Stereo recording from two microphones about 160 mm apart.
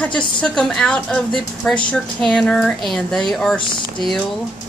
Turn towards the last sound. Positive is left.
turn(degrees=30)  # may be behind; listen again after turning